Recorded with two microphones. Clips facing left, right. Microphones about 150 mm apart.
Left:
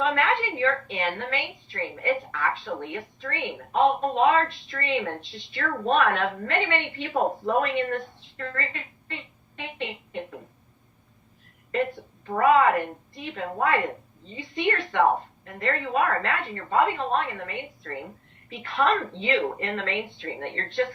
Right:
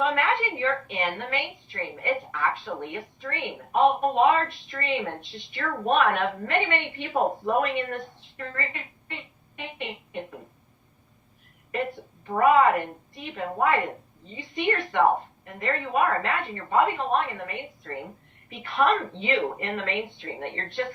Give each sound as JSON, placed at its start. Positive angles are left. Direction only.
{"t": 0.0, "sound": "a woman's voice", "side_deg": -15}
{"t": 12.2, "sound": "a woman's voice", "side_deg": -15}